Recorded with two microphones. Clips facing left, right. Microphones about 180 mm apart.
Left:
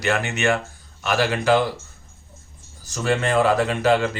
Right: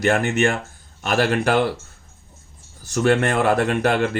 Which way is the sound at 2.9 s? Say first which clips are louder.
Right 3 dB; 65° right (ahead or behind).